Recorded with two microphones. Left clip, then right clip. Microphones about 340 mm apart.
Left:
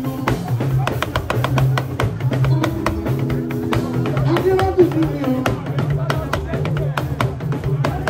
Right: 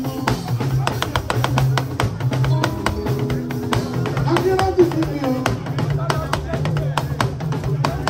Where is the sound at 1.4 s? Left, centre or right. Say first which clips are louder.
Even; right.